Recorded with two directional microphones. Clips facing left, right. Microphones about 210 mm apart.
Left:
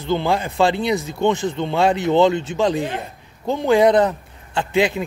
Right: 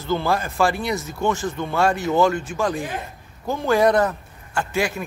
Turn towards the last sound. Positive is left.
turn(degrees=20)  # may be behind; listen again after turning